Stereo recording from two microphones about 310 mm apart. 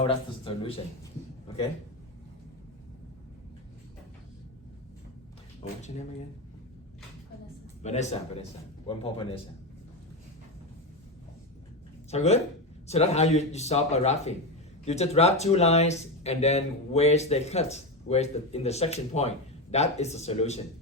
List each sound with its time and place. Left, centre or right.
0.0 s speech: centre
7.8 s a man's voice: left
12.1 s speech: left